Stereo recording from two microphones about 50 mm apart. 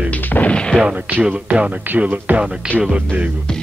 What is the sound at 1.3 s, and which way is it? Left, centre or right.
Speech, right.